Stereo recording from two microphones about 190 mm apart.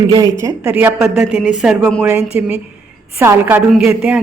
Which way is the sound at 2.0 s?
10° right (ahead or behind).